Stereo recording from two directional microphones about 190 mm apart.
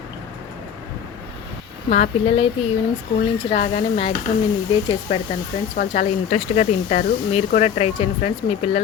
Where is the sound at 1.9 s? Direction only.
35° left (ahead or behind).